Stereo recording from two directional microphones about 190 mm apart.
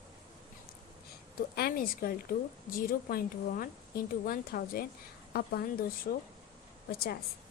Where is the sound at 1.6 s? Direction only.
50° left (ahead or behind).